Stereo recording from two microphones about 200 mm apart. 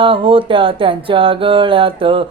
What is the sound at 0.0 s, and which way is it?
Mantra, 25° right (ahead or behind).